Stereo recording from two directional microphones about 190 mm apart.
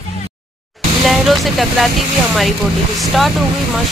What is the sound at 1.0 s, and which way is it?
Vehicle, centre (ahead or behind).